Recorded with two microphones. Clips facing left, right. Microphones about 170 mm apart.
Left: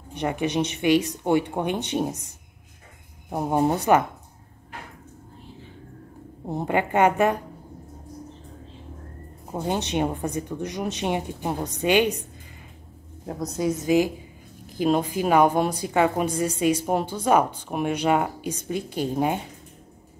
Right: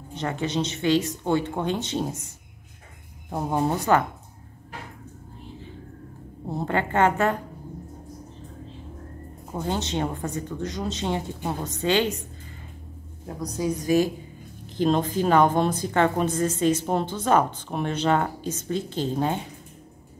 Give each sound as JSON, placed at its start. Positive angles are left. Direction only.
{"t": 0.1, "sound": "a woman's voice", "side_deg": 15}
{"t": 6.4, "sound": "a woman's voice", "side_deg": 15}
{"t": 9.5, "sound": "a woman's voice", "side_deg": 15}
{"t": 13.4, "sound": "a woman's voice", "side_deg": 20}